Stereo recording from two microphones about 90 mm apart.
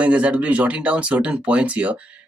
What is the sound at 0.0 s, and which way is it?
Speech, 15° right (ahead or behind).